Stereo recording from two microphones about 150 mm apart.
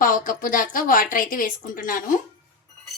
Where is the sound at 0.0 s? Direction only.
65° left (ahead or behind).